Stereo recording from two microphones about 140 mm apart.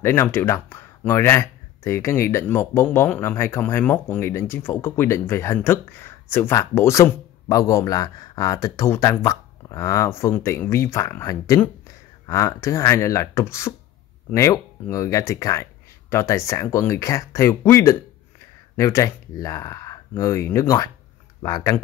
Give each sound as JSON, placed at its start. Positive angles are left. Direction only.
{"t": 0.0, "sound": "speech", "side_deg": 15}